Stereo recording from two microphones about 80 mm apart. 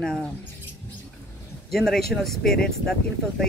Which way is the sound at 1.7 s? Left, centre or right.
Centre.